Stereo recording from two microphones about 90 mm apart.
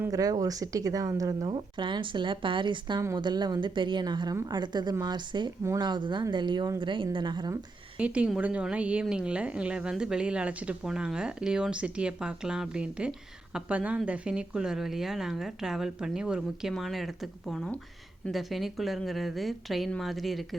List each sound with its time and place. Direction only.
0.1 s speech: 45° right (ahead or behind)
1.5 s a woman's voice: 65° right (ahead or behind)
7.9 s speech: 15° right (ahead or behind)
18.3 s speech: centre (ahead or behind)